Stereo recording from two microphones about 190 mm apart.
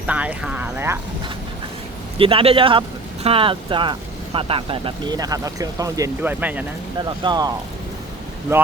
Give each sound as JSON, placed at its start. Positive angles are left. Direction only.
{"t": 0.1, "sound": "speech", "side_deg": -5}
{"t": 2.1, "sound": "speech", "side_deg": -30}
{"t": 7.0, "sound": "speech", "side_deg": -20}